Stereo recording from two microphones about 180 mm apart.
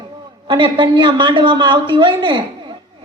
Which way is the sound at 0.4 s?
30° right (ahead or behind).